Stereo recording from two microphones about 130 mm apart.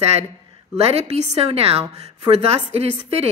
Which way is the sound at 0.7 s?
55° right (ahead or behind).